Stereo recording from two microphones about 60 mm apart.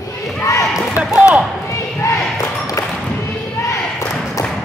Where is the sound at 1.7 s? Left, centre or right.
Left.